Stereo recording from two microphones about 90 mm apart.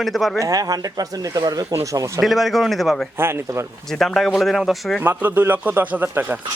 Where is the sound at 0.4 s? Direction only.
45° right (ahead or behind).